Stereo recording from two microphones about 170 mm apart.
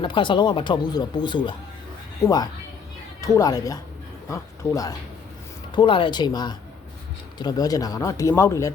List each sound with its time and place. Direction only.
0.0 s speech: 30° left (ahead or behind)